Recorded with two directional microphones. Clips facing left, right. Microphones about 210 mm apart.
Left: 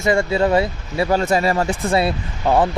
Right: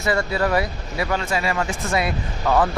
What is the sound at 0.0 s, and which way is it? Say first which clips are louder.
Speech: left 4 dB; 25° left (ahead or behind).